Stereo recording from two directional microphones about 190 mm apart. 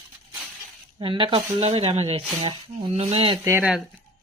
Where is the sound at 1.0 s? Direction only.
25° right (ahead or behind).